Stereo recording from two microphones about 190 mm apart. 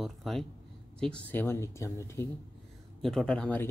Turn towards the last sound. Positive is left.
turn(degrees=5)  # may be behind; listen again after turning